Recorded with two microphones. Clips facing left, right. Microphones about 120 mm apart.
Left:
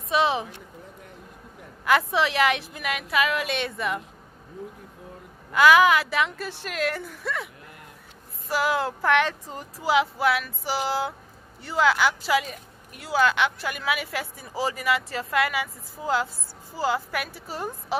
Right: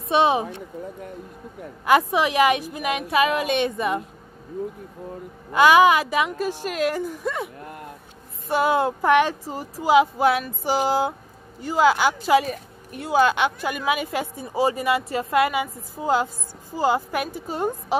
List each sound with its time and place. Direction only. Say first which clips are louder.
0.1 s a woman's voice: right 4 dB; 25° right (ahead or behind)
1.9 s a woman's voice: right 3 dB; 15° right (ahead or behind)
3.0 s a woman's voice: right 4 dB; 30° right (ahead or behind)
5.5 s a woman's voice: right 2 dB; 20° right (ahead or behind)
7.6 s speech: right 9 dB; 50° right (ahead or behind)
8.5 s a woman's voice: right 5 dB; 25° right (ahead or behind)